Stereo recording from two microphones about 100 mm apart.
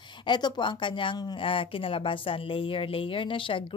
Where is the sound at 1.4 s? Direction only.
60° left (ahead or behind).